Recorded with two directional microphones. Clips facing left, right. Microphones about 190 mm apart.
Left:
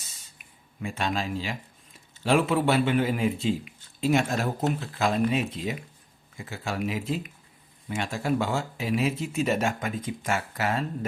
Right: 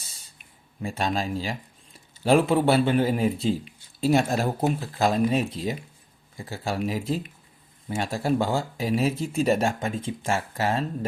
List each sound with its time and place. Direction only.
0.8 s speech: 35° right (ahead or behind)